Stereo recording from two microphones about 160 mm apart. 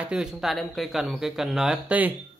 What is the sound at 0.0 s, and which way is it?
Speech, 5° right (ahead or behind).